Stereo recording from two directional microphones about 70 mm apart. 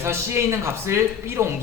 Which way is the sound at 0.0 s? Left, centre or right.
Right.